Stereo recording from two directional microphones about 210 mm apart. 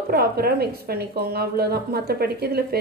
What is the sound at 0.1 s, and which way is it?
A woman's voice, 45° right (ahead or behind).